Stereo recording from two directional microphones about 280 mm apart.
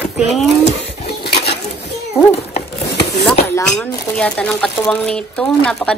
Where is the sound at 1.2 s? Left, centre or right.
Left.